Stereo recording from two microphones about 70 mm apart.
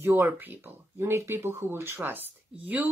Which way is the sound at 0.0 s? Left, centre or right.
Right.